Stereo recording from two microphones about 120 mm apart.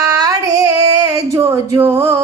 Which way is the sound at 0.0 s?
30° right (ahead or behind).